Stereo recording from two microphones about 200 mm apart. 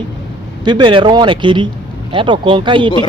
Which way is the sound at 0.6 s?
25° right (ahead or behind).